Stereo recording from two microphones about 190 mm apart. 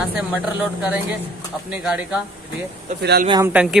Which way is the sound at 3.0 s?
60° right (ahead or behind).